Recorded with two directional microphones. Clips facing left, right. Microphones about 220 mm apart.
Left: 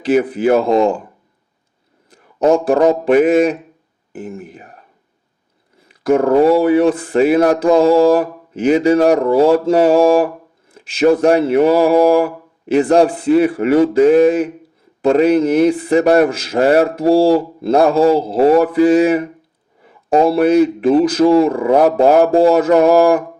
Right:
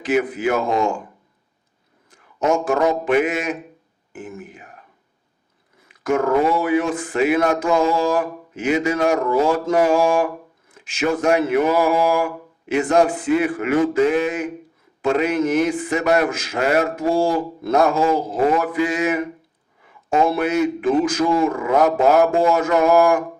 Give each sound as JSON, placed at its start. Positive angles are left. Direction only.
{"t": 0.0, "sound": "speech", "side_deg": 35}
{"t": 2.0, "sound": "a man's voice", "side_deg": 35}
{"t": 5.9, "sound": "speech", "side_deg": 35}